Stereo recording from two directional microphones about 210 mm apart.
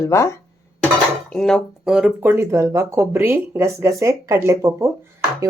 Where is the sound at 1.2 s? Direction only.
Centre (ahead or behind).